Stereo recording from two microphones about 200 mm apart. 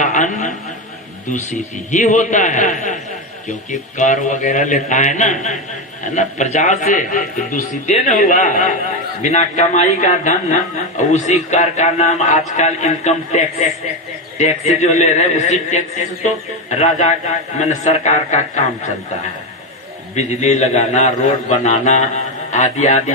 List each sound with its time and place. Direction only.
0.0 s a sound: 40° left (ahead or behind)
1.3 s speech: 40° left (ahead or behind)
20.1 s speech: 35° left (ahead or behind)